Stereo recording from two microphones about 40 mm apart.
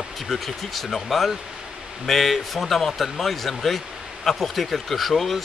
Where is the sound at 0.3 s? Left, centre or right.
Centre.